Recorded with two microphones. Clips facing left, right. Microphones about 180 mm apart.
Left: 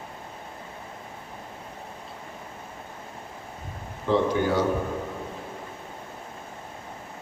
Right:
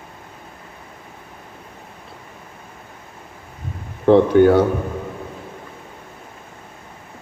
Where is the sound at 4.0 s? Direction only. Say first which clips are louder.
Right 11 dB; 60° right (ahead or behind).